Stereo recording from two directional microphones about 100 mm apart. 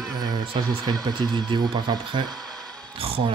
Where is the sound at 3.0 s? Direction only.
70° right (ahead or behind).